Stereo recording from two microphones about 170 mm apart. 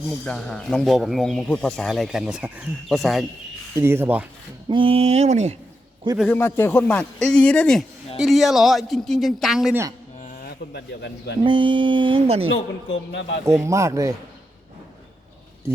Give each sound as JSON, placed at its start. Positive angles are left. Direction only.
{"t": 0.1, "sound": "speech", "side_deg": 5}
{"t": 3.8, "sound": "speech", "side_deg": -15}
{"t": 4.7, "sound": "speech", "side_deg": -30}
{"t": 6.1, "sound": "speech", "side_deg": 10}
{"t": 10.4, "sound": "a man's voice", "side_deg": 75}
{"t": 11.4, "sound": "speech", "side_deg": -30}
{"t": 13.1, "sound": "speech", "side_deg": 90}
{"t": 13.4, "sound": "speech", "side_deg": -15}